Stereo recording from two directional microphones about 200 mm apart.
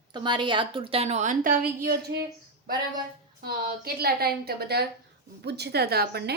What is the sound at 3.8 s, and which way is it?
A woman's voice, 50° right (ahead or behind).